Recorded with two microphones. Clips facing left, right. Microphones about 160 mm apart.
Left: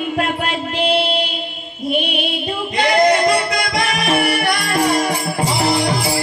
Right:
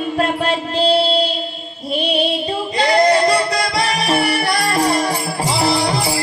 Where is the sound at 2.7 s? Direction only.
35° right (ahead or behind).